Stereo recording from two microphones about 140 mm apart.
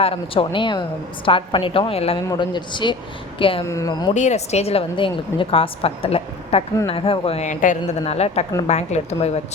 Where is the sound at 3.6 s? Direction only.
25° left (ahead or behind).